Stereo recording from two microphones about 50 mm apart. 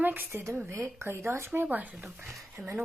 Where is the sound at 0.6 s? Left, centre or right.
Right.